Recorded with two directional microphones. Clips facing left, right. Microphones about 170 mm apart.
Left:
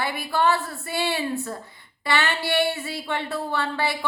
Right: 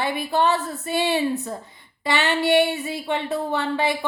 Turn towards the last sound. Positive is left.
turn(degrees=-20)  # may be behind; listen again after turning